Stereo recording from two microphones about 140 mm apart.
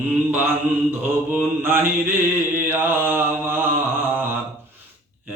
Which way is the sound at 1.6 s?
15° right (ahead or behind).